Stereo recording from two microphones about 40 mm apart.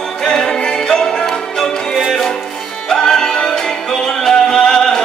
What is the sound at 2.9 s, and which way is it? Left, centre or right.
Music, centre.